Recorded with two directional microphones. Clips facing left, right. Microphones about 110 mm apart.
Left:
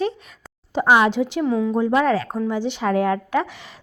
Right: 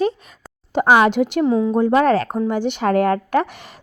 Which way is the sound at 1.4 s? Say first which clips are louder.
Right 3 dB; 30° right (ahead or behind).